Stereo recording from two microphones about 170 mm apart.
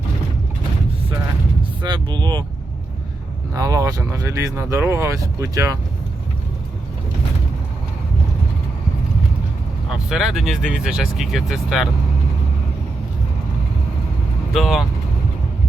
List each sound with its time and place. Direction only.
1.8 s speech: 25° right (ahead or behind)
3.5 s speech: 20° right (ahead or behind)
9.9 s speech: centre (ahead or behind)
14.5 s speech: centre (ahead or behind)